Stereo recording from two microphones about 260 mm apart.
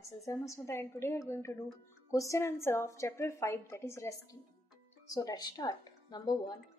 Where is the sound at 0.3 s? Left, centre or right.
Centre.